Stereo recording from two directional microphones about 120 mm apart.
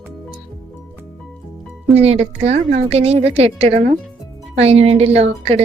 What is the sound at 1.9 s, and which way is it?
A woman's voice, 60° right (ahead or behind).